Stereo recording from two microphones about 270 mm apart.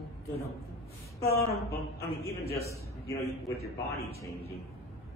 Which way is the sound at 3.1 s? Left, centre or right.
Left.